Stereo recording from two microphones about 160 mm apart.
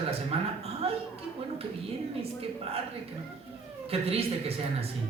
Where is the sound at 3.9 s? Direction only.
40° right (ahead or behind).